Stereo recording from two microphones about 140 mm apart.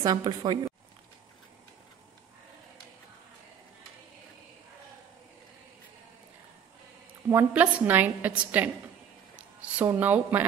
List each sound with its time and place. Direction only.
0.0 s a woman's voice: 30° right (ahead or behind)
7.2 s a woman's voice: 15° right (ahead or behind)